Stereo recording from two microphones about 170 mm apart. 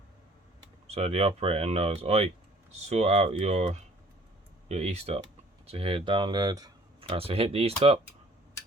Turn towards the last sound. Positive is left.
turn(degrees=-35)  # may be behind; listen again after turning